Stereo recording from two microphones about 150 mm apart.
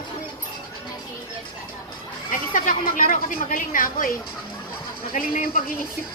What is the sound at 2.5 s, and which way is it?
A woman's voice, 65° left (ahead or behind).